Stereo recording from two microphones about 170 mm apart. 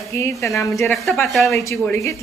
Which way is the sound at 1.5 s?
15° left (ahead or behind).